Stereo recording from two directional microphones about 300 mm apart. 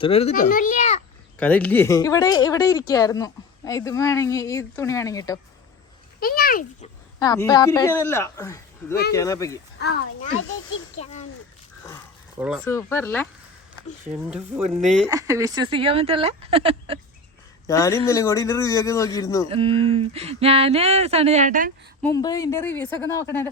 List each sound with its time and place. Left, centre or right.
0.0 s speech: centre
1.4 s a woman's voice: centre
6.1 s speech: left
7.2 s a woman's voice: centre
9.8 s a child's voice: left
10.9 s speech: left
12.4 s speech: centre
12.6 s a woman's voice: centre
14.3 s speech: centre
17.7 s a woman's voice: centre
19.5 s speech: centre
22.0 s a woman's voice: centre